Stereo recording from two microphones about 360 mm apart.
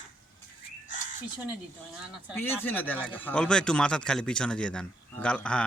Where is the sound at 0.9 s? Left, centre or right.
Left.